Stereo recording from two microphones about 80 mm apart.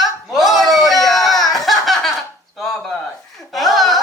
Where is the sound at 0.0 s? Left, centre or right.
Centre.